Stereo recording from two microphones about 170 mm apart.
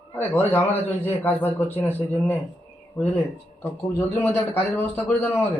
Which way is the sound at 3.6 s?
15° left (ahead or behind).